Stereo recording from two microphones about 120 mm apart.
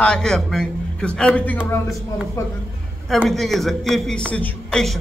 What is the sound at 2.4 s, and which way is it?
Speech, 20° left (ahead or behind).